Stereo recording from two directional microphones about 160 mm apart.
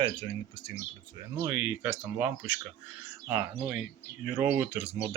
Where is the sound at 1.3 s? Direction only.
15° right (ahead or behind).